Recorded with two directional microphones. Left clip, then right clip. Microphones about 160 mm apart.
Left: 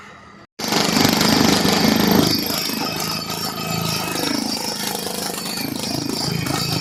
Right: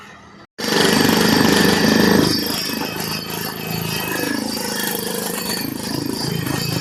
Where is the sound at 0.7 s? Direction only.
20° left (ahead or behind).